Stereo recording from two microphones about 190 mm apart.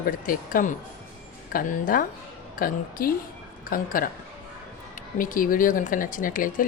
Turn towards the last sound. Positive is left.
turn(degrees=45)  # may be behind; listen again after turning